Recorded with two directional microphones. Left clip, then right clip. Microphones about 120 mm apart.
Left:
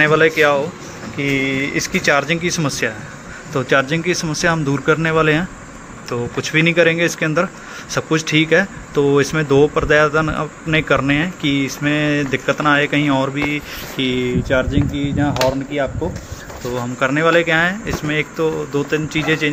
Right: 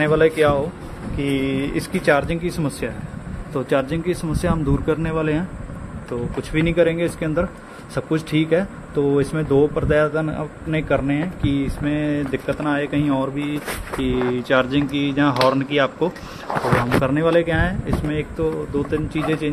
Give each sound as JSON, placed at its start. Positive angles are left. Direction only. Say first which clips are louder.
{"t": 0.0, "sound": "speech", "louder": "left 4 dB", "side_deg": -15}
{"t": 5.1, "sound": "speech", "louder": "left 7 dB", "side_deg": 5}
{"t": 17.0, "sound": "speech", "louder": "left 4 dB", "side_deg": -25}